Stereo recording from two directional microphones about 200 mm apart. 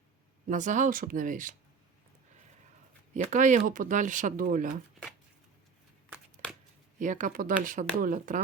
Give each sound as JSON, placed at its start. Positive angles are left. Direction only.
{"t": 0.4, "sound": "speech", "side_deg": -40}
{"t": 3.2, "sound": "speech", "side_deg": -40}
{"t": 6.4, "sound": "shuffling cards", "side_deg": 5}
{"t": 7.0, "sound": "speech", "side_deg": -40}